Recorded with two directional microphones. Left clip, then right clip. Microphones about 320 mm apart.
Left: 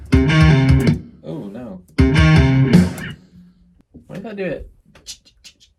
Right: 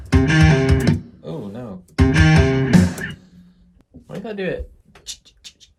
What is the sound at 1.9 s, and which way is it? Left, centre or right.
Music, centre.